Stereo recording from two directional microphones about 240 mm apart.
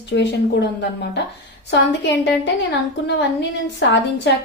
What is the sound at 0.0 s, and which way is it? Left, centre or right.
Speech, left.